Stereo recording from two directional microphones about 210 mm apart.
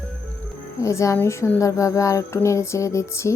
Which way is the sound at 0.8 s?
15° left (ahead or behind).